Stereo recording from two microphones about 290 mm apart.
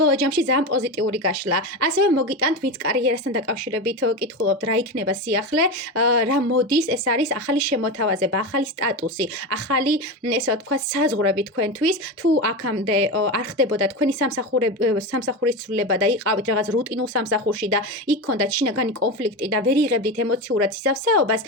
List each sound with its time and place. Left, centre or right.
0.0 s speech: right